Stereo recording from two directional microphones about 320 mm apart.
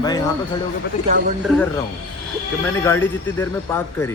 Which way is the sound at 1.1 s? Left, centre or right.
Right.